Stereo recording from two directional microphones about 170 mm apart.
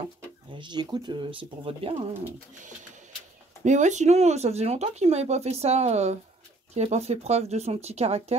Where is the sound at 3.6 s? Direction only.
45° right (ahead or behind).